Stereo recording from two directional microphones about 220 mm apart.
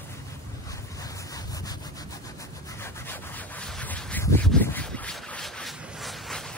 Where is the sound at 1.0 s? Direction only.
15° left (ahead or behind).